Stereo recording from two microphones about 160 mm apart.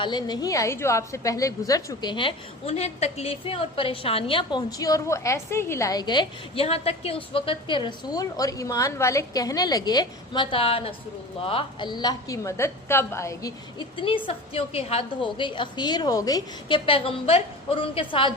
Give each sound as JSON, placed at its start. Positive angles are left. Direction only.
{"t": 0.0, "sound": "a woman's voice", "side_deg": 25}
{"t": 13.7, "sound": "a woman's voice", "side_deg": 35}